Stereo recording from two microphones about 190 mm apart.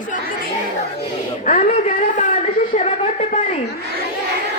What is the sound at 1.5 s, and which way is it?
Speech, 40° left (ahead or behind).